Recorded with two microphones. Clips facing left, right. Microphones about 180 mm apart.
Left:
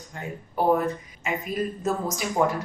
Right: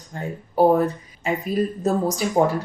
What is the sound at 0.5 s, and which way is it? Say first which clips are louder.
Speech: right 5 dB; 35° right (ahead or behind).